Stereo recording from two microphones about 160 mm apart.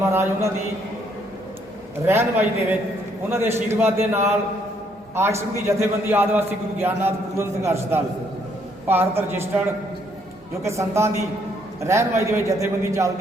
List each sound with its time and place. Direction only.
0.1 s a man's voice: 15° right (ahead or behind)
2.0 s a man's voice: 15° right (ahead or behind)
10.6 s a man's voice: 20° right (ahead or behind)